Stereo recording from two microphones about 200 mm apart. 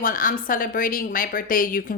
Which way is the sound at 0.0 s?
45° left (ahead or behind).